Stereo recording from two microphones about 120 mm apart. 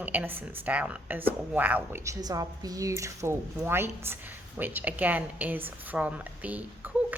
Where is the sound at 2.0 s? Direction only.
30° right (ahead or behind).